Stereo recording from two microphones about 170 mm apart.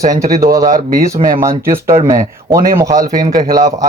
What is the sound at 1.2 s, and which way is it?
Speech, 30° right (ahead or behind).